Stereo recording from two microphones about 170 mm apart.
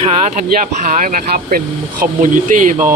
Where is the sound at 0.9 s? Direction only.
50° right (ahead or behind).